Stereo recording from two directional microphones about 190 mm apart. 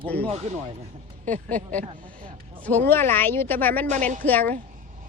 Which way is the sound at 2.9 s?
10° left (ahead or behind).